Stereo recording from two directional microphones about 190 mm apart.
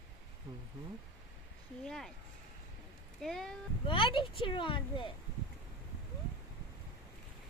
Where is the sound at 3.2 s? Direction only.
Centre (ahead or behind).